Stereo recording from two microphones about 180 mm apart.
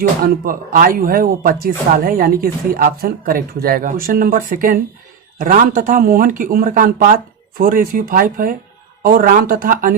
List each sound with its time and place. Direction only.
0.4 s speech: 55° right (ahead or behind)